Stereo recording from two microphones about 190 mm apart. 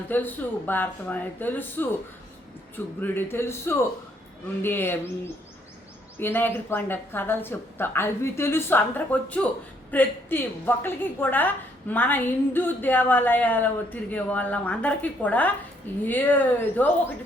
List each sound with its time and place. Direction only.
0.1 s a woman's voice: 10° left (ahead or behind)
6.1 s a woman's voice: 10° left (ahead or behind)